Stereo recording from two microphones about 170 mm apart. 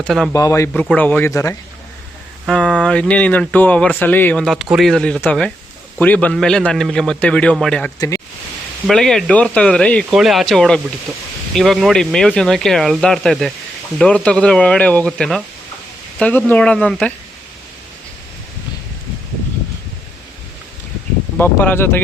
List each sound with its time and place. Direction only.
0.0 s a man's voice: 5° left (ahead or behind)
0.3 s speech: 20° left (ahead or behind)
0.7 s speech: 5° left (ahead or behind)
2.5 s a man's voice: centre (ahead or behind)
7.9 s speech: 20° left (ahead or behind)
8.9 s a man's voice: 5° left (ahead or behind)
21.3 s speech: 10° left (ahead or behind)